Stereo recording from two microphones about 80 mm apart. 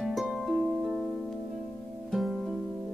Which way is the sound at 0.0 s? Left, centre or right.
Centre.